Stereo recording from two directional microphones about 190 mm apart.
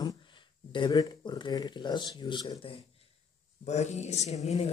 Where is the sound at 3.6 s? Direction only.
35° left (ahead or behind).